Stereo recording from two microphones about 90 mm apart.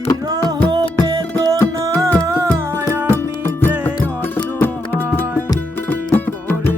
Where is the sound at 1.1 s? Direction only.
45° right (ahead or behind); by 3.0 s 25° right (ahead or behind).